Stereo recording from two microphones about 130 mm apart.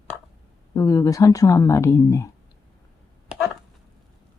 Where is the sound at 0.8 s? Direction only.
25° left (ahead or behind).